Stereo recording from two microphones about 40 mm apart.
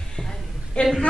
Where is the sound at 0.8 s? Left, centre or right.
Left.